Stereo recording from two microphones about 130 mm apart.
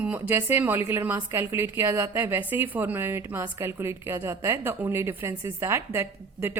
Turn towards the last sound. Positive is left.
turn(degrees=-15)  # may be behind; listen again after turning